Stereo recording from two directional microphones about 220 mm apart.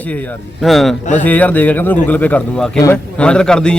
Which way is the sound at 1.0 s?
30° left (ahead or behind).